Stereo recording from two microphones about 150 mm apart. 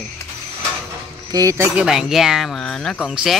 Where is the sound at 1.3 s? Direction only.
20° right (ahead or behind).